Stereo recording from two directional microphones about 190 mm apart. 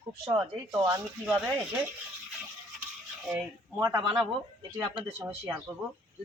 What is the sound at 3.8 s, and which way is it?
Speech, 20° right (ahead or behind).